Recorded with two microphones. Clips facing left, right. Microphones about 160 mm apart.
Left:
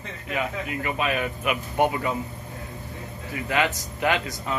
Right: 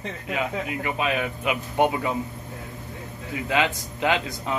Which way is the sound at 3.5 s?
15° right (ahead or behind).